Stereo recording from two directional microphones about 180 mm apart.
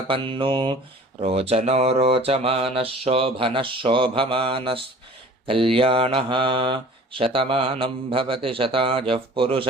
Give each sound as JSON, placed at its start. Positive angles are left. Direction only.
{"t": 0.1, "sound": "speech", "side_deg": -30}
{"t": 1.2, "sound": "a sound", "side_deg": -35}
{"t": 5.5, "sound": "speech", "side_deg": -30}